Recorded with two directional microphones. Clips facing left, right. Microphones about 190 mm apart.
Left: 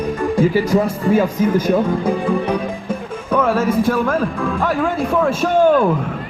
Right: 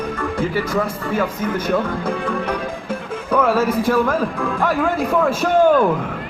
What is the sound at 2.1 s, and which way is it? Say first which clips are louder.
Music: left 4 dB; 20° left (ahead or behind).